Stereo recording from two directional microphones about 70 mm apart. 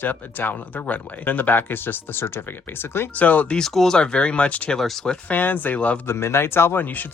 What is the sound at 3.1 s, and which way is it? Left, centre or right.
Speech, left.